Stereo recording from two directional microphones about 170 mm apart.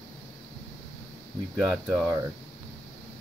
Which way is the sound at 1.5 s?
5° right (ahead or behind).